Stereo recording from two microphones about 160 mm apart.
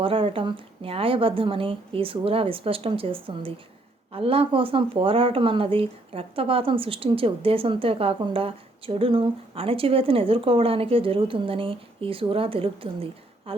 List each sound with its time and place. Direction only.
0.0 s speech: 35° right (ahead or behind)